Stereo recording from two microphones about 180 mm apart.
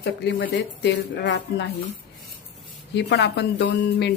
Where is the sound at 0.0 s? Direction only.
70° left (ahead or behind).